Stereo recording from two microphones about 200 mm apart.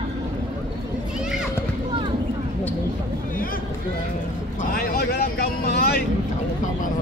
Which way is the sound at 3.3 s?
45° left (ahead or behind).